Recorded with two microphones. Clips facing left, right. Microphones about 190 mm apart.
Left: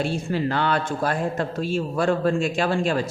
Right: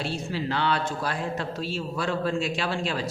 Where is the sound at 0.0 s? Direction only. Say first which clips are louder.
Left 6 dB; 50° left (ahead or behind).